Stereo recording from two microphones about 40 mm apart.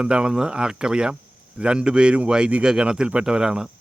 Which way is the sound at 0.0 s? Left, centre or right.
Right.